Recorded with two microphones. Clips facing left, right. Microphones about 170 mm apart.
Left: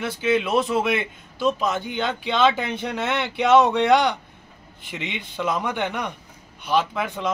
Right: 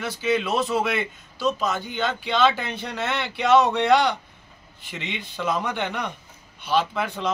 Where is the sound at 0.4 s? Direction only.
15° left (ahead or behind).